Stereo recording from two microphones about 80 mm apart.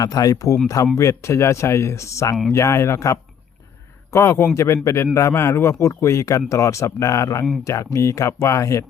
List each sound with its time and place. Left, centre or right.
0.0 s speech: left